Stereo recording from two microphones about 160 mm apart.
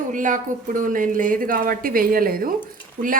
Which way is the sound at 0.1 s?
55° right (ahead or behind).